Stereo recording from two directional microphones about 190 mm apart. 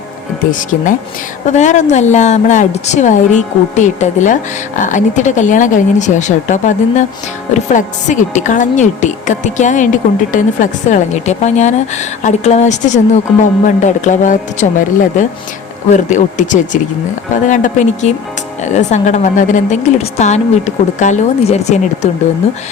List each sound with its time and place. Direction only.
1.5 s a woman's voice: 40° left (ahead or behind)